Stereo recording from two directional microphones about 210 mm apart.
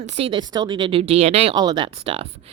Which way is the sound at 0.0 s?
25° right (ahead or behind).